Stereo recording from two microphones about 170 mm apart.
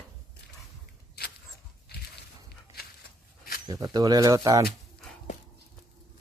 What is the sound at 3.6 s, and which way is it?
Speech, 25° right (ahead or behind).